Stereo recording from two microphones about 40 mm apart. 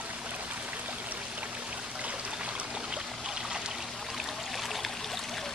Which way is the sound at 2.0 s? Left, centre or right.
Right.